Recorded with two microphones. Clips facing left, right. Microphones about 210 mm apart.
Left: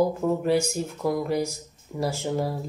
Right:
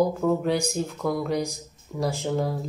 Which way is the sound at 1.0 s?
5° left (ahead or behind).